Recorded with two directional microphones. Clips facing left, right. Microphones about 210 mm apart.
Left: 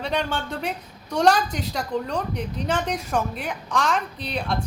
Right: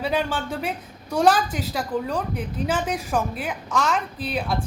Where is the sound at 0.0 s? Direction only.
5° right (ahead or behind).